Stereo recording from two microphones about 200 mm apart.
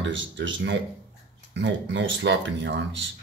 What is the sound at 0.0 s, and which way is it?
Speech, 65° right (ahead or behind).